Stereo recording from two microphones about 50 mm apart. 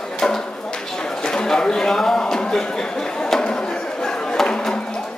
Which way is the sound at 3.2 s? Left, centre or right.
Centre.